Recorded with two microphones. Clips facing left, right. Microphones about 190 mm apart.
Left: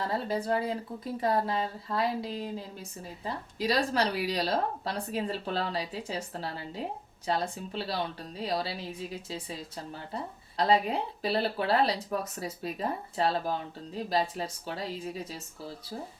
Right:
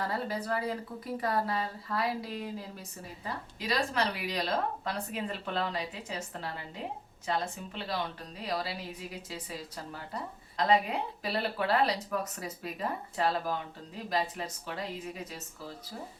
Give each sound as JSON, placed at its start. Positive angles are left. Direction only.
{"t": 0.0, "sound": "speech", "side_deg": 25}